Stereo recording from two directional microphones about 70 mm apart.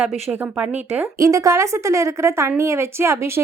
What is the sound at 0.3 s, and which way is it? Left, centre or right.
Speech, centre.